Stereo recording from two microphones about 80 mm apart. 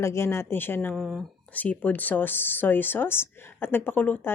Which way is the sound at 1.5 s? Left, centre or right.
Left.